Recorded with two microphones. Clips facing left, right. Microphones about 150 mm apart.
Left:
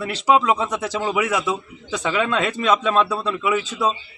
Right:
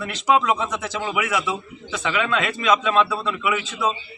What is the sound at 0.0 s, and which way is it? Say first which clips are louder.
A man's voice: left 2 dB; 30° left (ahead or behind).